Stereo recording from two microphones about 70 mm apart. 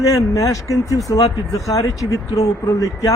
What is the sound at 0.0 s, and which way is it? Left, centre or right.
Speech, left.